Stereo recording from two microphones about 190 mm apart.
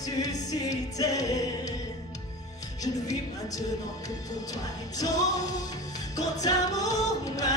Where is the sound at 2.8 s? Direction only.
20° left (ahead or behind).